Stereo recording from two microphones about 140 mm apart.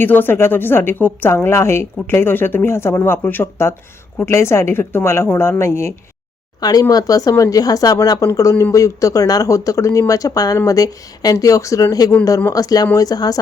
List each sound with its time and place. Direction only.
0.0 s a woman's voice: 15° left (ahead or behind)